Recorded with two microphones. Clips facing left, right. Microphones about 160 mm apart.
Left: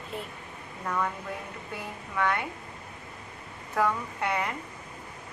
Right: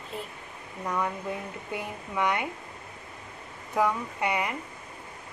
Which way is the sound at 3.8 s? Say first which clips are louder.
Right 1 dB; 10° right (ahead or behind).